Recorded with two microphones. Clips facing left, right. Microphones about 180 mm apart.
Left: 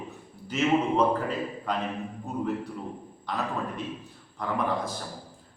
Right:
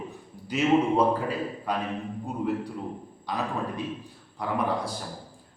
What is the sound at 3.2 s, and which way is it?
Speech, 15° right (ahead or behind).